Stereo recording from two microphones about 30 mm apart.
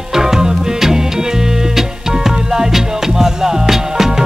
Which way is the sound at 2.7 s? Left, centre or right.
Centre.